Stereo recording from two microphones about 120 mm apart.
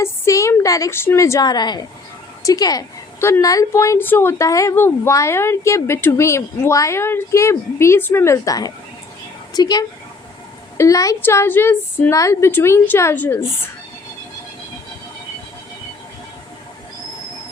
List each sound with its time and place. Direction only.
0.0 s a woman's voice: 25° left (ahead or behind)
3.2 s a woman's voice: 20° left (ahead or behind)